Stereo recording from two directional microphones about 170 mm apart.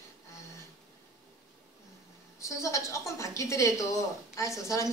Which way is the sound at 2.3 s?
20° left (ahead or behind).